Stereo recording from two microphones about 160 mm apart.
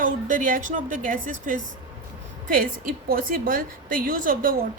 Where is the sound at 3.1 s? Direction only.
60° right (ahead or behind).